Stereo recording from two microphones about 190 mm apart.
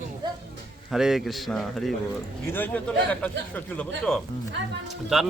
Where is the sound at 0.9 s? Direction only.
Centre (ahead or behind).